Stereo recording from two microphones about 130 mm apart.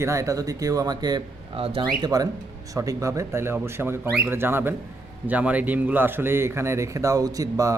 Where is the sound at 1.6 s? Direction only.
50° right (ahead or behind).